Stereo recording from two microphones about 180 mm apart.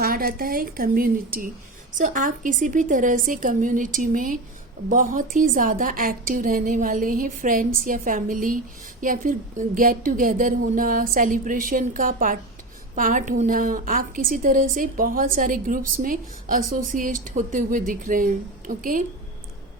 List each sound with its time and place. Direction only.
0.0 s a woman's voice: 55° right (ahead or behind)